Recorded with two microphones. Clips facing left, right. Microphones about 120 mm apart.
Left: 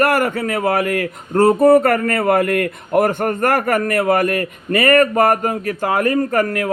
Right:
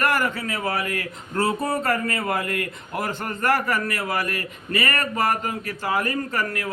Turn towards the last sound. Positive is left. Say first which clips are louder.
# left 9 dB
turn(degrees=50)  # may be behind; listen again after turning